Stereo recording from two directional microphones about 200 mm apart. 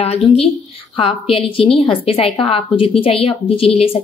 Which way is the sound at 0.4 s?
30° left (ahead or behind).